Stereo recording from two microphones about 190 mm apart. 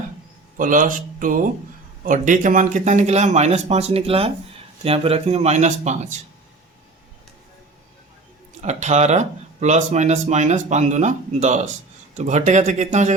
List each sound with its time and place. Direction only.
0.5 s speech: 45° right (ahead or behind)
8.6 s speech: 35° right (ahead or behind)